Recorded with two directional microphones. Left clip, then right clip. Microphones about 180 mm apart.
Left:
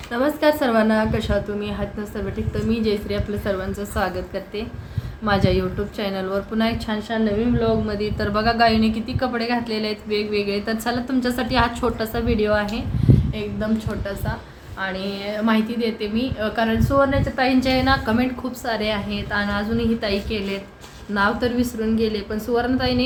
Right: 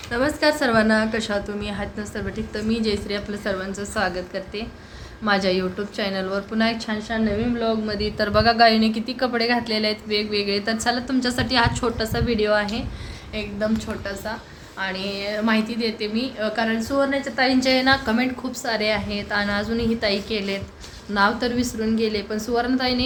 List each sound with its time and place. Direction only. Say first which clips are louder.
0.1 s a woman's voice: left 1 dB; 5° left (ahead or behind)
7.9 s a woman's voice: right 2 dB; 15° right (ahead or behind)